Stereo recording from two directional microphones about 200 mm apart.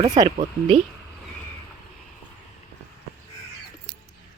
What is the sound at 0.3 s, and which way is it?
Speech, 30° right (ahead or behind).